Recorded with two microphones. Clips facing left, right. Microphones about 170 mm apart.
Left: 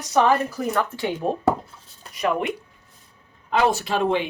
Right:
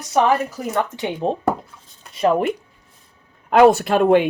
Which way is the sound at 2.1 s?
30° right (ahead or behind).